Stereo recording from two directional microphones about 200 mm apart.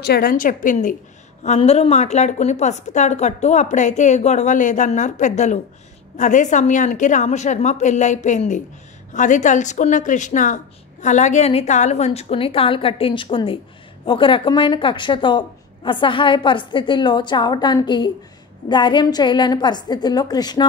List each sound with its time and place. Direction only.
0.0 s a woman's voice: 50° left (ahead or behind); by 20.6 s 20° left (ahead or behind)